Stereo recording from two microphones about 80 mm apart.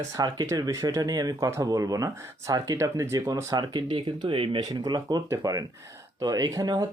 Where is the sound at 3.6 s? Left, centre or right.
Right.